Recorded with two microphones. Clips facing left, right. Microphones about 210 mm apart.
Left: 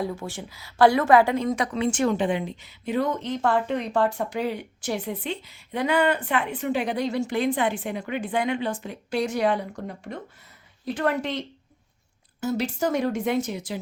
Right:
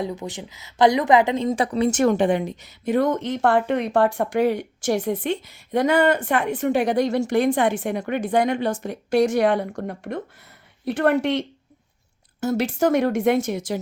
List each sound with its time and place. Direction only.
0.0 s a woman's voice: 20° right (ahead or behind); by 9.1 s 45° right (ahead or behind)
9.3 s speech: 70° right (ahead or behind)
12.6 s speech: 55° right (ahead or behind)
13.5 s speech: 45° right (ahead or behind)